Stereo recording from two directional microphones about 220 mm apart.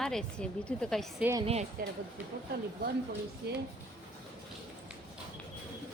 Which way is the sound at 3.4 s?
50° right (ahead or behind).